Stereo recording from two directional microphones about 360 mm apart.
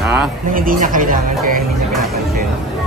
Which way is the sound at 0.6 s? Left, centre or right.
Right.